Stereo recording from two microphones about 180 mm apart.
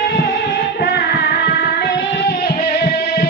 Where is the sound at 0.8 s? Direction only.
65° left (ahead or behind).